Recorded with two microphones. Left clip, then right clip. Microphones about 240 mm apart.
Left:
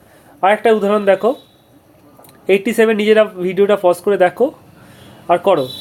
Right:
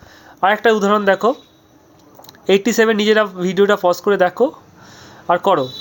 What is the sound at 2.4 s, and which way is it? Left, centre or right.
Speech, right.